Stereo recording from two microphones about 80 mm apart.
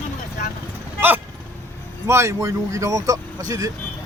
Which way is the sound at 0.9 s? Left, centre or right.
Right.